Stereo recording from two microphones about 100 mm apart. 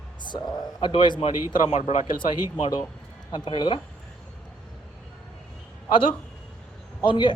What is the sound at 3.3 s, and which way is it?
Speech, 50° left (ahead or behind).